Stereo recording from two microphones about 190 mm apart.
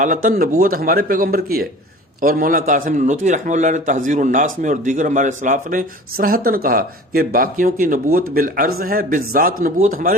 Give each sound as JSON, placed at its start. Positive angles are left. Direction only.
{"t": 0.0, "sound": "a man's voice", "side_deg": -45}